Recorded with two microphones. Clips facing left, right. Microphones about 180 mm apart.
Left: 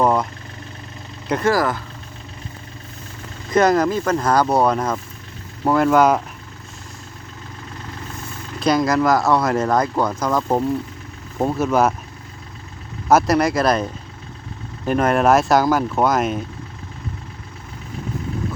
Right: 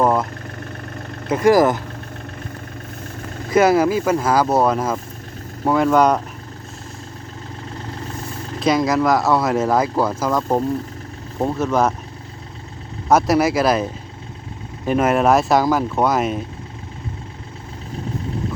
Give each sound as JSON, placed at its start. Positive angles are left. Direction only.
{"t": 0.0, "sound": "vehicle", "side_deg": 0}
{"t": 1.3, "sound": "speech", "side_deg": -15}
{"t": 3.5, "sound": "speech", "side_deg": -5}
{"t": 8.6, "sound": "speech", "side_deg": 0}
{"t": 13.1, "sound": "speech", "side_deg": 0}
{"t": 14.8, "sound": "speech", "side_deg": -5}